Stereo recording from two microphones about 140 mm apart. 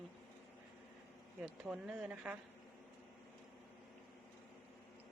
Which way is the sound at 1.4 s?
5° right (ahead or behind).